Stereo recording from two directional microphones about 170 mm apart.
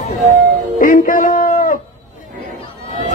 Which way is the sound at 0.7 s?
55° left (ahead or behind).